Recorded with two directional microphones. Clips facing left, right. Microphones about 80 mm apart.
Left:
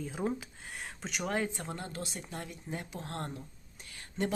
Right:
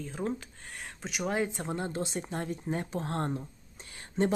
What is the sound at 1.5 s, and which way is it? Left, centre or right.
Speech, right.